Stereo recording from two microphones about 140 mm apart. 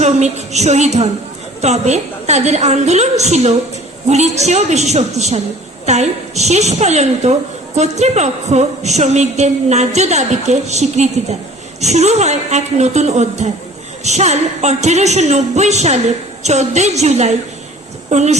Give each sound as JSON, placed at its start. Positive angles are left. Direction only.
{"t": 0.0, "sound": "a woman's voice", "side_deg": -55}